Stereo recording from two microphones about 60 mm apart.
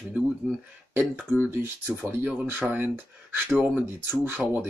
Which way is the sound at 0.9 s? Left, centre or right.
Right.